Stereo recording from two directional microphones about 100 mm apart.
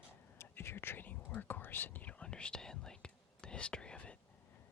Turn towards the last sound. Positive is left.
turn(degrees=10)  # may be behind; listen again after turning